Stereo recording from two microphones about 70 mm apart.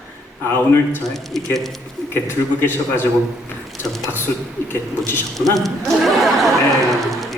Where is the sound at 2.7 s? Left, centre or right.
Left.